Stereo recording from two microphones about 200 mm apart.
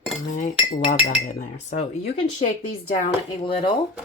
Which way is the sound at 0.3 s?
40° left (ahead or behind).